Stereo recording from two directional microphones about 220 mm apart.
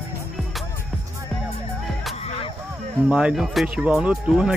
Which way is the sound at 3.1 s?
5° right (ahead or behind).